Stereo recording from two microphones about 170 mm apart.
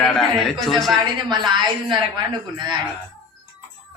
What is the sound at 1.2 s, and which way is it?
Speech, 25° right (ahead or behind).